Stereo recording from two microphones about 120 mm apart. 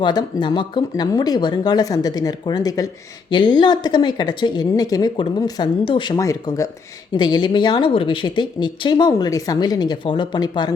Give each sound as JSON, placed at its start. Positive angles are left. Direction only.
{"t": 0.0, "sound": "speech", "side_deg": 40}
{"t": 3.2, "sound": "speech", "side_deg": 40}